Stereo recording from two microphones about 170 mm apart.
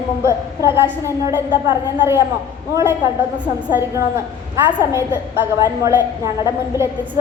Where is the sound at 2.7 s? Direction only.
15° right (ahead or behind).